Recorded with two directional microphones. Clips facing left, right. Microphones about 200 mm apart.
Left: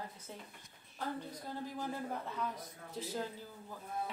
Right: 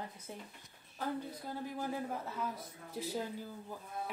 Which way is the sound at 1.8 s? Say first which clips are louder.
Right 2 dB; 5° right (ahead or behind).